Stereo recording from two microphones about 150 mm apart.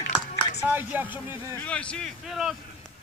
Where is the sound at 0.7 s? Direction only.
10° right (ahead or behind).